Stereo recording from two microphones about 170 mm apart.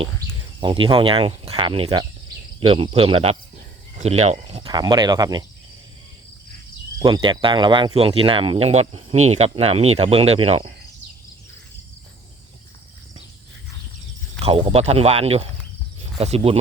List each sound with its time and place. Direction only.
0.6 s speech: 30° right (ahead or behind)
4.6 s speech: 25° right (ahead or behind)
7.0 s speech: 25° right (ahead or behind)
14.4 s speech: 35° right (ahead or behind)